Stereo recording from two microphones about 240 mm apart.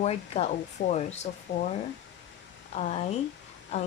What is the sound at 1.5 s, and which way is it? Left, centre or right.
Speech, left.